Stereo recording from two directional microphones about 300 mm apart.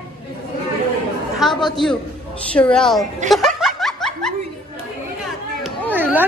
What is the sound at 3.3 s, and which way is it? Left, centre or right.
Snicker, centre.